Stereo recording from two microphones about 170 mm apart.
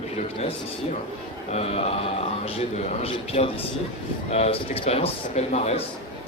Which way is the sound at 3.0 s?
35° left (ahead or behind).